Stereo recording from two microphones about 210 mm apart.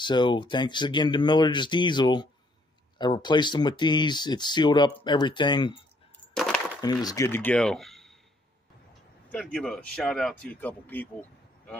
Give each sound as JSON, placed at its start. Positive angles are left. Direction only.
{"t": 0.0, "sound": "speech", "side_deg": 20}
{"t": 6.3, "sound": "a sound", "side_deg": 5}
{"t": 6.8, "sound": "speech", "side_deg": 20}
{"t": 9.3, "sound": "speech", "side_deg": 5}